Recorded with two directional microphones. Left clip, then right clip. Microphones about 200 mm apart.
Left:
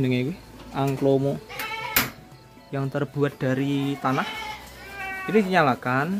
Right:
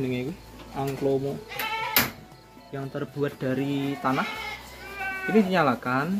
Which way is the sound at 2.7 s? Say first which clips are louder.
Left 5 dB; 30° left (ahead or behind).